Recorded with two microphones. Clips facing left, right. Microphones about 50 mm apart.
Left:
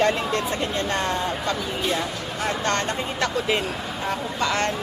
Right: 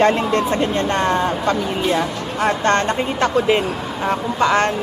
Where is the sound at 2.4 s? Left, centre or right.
Right.